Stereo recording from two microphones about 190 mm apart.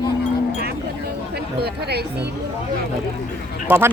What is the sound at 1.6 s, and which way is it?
Speech, 60° right (ahead or behind).